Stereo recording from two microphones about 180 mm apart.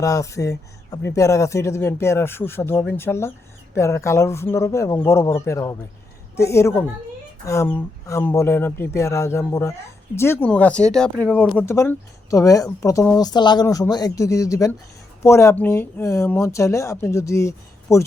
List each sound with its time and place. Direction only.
0.0 s speech: 20° left (ahead or behind)